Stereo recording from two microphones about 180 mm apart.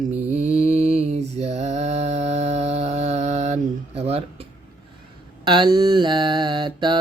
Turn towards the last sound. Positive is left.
turn(degrees=-25)  # may be behind; listen again after turning